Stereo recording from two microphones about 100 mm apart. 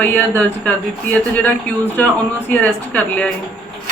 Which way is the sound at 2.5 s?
15° left (ahead or behind).